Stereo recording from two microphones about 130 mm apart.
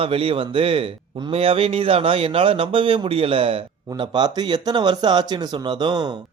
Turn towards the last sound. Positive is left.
turn(degrees=-35)  # may be behind; listen again after turning